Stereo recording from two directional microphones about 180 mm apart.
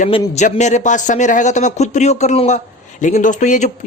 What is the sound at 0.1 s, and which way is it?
Speech, 35° left (ahead or behind).